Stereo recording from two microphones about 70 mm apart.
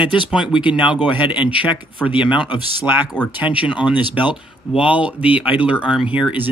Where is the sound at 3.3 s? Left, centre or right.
Centre.